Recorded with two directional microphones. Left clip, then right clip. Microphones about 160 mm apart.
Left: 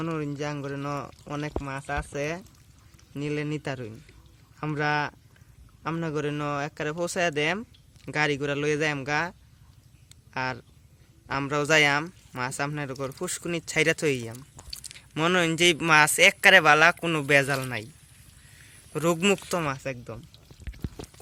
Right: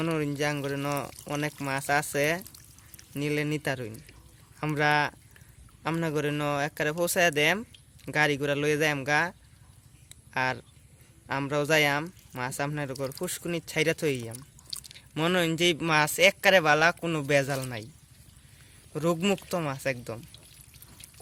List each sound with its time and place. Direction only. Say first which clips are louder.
0.0 s speech: right 3 dB; 10° right (ahead or behind)
10.3 s speech: right 2 dB; centre (ahead or behind)
18.9 s speech: left 3 dB; centre (ahead or behind)